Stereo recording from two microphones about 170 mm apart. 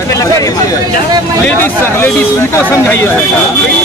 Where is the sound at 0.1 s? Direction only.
20° left (ahead or behind).